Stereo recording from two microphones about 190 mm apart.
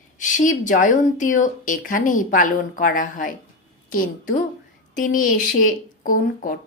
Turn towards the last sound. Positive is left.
turn(degrees=45)  # may be behind; listen again after turning